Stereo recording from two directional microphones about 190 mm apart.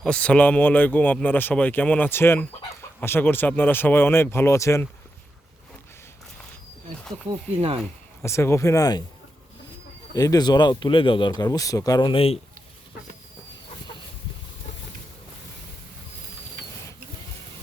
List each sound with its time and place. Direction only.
0.0 s speech: 5° left (ahead or behind)
7.5 s speech: 30° right (ahead or behind)
8.2 s speech: 15° left (ahead or behind)
10.2 s speech: 20° left (ahead or behind)